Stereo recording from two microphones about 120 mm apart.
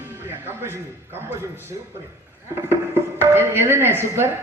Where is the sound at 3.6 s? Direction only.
20° right (ahead or behind).